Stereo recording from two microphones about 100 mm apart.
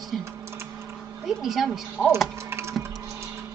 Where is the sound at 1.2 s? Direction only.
Centre (ahead or behind).